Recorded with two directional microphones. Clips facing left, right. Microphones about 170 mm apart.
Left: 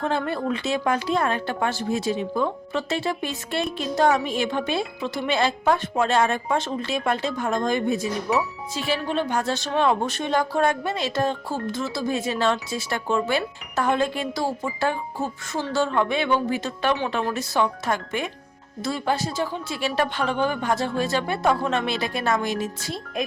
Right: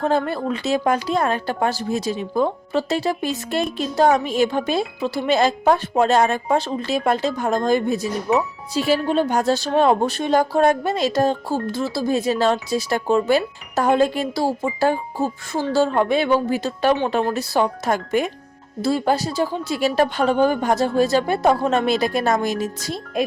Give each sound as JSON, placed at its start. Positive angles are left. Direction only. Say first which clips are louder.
{"t": 0.0, "sound": "a woman's voice", "louder": "right 4 dB", "side_deg": -40}